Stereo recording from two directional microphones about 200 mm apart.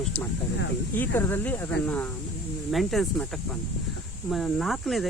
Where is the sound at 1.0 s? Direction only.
10° left (ahead or behind).